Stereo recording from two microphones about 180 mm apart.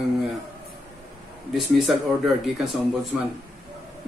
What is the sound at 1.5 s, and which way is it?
Speech, centre (ahead or behind).